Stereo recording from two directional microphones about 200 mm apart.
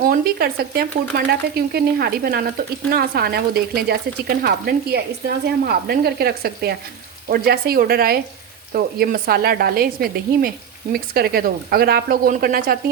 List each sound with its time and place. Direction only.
0.0 s speech: 50° right (ahead or behind)